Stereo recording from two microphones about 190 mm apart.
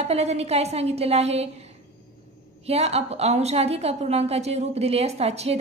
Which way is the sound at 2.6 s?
35° right (ahead or behind).